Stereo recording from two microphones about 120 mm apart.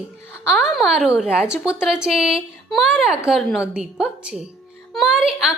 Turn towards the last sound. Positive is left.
turn(degrees=-5)  # may be behind; listen again after turning